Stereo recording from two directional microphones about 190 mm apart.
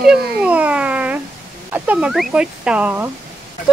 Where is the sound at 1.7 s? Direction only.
5° right (ahead or behind).